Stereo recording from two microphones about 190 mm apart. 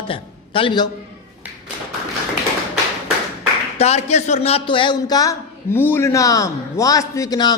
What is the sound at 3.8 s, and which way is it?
A man's voice, 35° left (ahead or behind).